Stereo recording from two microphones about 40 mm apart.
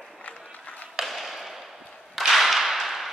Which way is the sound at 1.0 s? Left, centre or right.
Centre.